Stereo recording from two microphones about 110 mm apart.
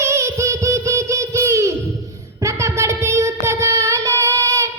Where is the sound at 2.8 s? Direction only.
25° right (ahead or behind).